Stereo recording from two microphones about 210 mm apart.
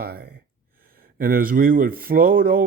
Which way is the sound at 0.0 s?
45° right (ahead or behind).